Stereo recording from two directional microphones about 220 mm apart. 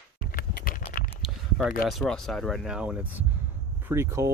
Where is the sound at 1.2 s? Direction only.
Centre (ahead or behind).